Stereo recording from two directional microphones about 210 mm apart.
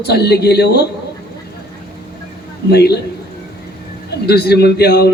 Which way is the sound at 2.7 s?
50° left (ahead or behind).